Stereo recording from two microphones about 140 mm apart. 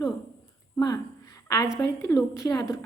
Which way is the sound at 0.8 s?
25° left (ahead or behind).